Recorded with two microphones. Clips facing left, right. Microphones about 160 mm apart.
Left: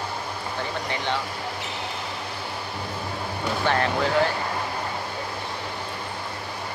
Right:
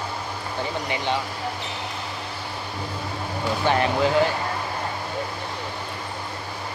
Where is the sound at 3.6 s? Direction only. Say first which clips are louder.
Right 3 dB; 20° right (ahead or behind).